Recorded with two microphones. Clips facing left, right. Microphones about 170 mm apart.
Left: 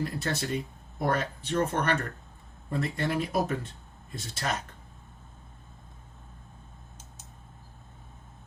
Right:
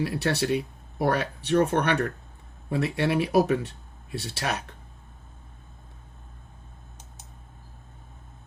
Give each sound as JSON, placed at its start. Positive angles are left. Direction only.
{"t": 0.0, "sound": "speech", "side_deg": -75}